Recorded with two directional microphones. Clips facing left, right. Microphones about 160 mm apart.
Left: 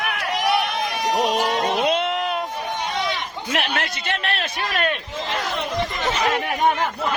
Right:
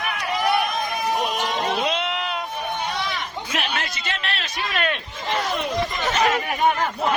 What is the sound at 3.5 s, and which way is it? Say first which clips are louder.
A man's voice: left 4 dB; 60° left (ahead or behind).